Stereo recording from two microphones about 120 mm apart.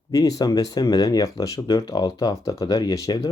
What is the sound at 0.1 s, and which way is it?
Speech, 30° left (ahead or behind).